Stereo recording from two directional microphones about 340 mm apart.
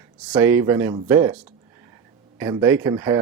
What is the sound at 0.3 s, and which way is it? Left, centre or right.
Speech, centre.